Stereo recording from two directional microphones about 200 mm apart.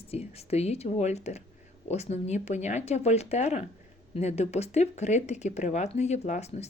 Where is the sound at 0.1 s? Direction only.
30° left (ahead or behind).